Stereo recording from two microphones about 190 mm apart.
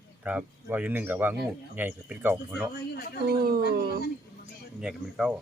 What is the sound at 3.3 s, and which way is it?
Speech, 55° right (ahead or behind).